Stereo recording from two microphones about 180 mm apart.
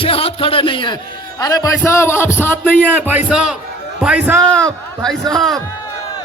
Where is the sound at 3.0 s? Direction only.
10° right (ahead or behind).